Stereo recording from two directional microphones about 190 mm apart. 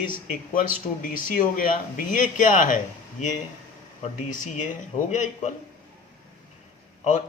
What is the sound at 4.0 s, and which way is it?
A man's voice, 40° left (ahead or behind).